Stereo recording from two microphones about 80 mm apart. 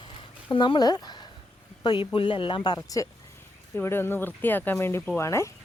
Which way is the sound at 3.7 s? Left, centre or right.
Left.